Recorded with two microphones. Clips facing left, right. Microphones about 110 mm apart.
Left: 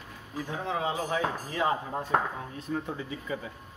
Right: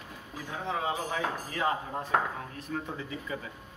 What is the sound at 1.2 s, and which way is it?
Speech, 25° left (ahead or behind).